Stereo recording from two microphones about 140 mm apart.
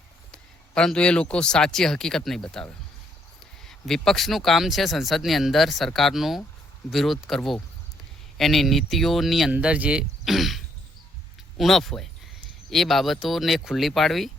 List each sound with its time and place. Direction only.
0.3 s speech: 5° left (ahead or behind)